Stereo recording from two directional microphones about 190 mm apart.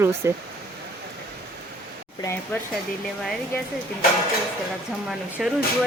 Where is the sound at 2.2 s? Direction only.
15° left (ahead or behind).